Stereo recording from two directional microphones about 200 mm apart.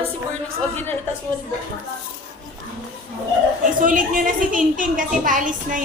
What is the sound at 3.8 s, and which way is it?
A woman's voice, 40° right (ahead or behind).